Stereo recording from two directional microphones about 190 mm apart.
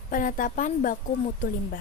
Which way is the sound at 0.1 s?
45° left (ahead or behind).